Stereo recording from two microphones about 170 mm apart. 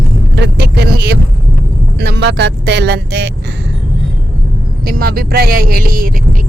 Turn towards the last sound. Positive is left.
turn(degrees=-55)  # may be behind; listen again after turning